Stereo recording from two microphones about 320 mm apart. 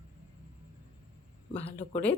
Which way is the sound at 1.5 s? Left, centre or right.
Centre.